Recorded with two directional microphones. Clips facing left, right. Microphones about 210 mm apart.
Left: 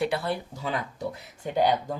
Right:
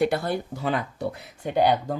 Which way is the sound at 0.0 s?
45° right (ahead or behind).